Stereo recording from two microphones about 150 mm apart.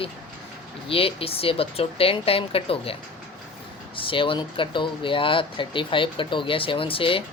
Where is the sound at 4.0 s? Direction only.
35° left (ahead or behind).